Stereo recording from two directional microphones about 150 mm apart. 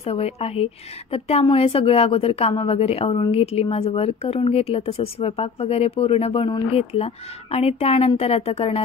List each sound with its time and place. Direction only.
0.0 s a woman's voice: 40° left (ahead or behind)